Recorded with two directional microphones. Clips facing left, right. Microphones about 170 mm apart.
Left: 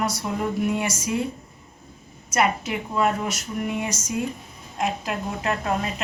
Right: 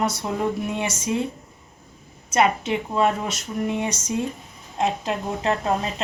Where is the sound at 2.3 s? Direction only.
25° right (ahead or behind).